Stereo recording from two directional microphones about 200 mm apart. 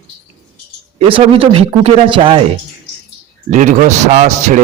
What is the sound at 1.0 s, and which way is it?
Mantra, 25° right (ahead or behind).